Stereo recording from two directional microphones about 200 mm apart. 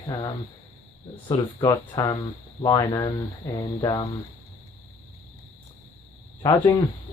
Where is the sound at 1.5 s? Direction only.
20° left (ahead or behind).